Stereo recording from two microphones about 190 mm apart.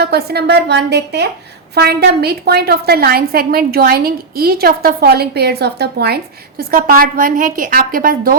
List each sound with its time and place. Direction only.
0.0 s a woman's voice: 60° right (ahead or behind)